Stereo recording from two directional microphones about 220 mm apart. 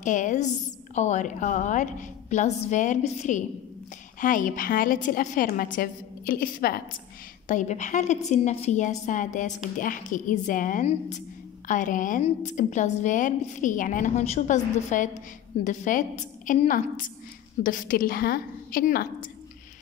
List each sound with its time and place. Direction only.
0.0 s a woman's voice: 35° left (ahead or behind)